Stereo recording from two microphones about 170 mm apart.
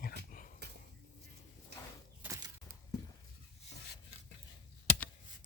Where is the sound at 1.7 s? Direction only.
75° right (ahead or behind).